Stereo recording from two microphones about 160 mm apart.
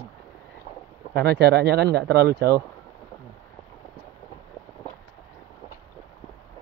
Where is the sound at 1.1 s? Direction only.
90° right.